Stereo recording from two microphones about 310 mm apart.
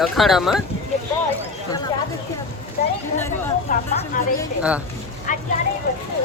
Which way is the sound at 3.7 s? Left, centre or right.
Left.